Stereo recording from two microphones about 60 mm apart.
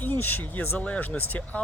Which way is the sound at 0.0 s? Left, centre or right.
Left.